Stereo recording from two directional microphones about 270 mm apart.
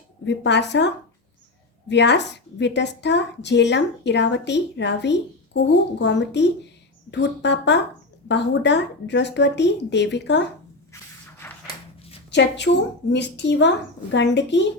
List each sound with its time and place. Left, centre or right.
0.3 s a woman's voice: left
1.9 s a woman's voice: left
12.3 s a woman's voice: left